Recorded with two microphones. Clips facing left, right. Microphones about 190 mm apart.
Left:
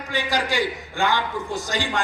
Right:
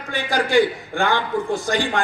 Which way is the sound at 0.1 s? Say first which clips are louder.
Right 5 dB; 55° right (ahead or behind).